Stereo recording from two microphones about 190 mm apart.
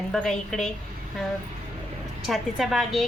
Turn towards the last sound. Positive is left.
turn(degrees=0)  # may be behind; listen again after turning